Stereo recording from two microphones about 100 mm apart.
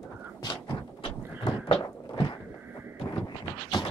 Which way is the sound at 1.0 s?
60° left (ahead or behind).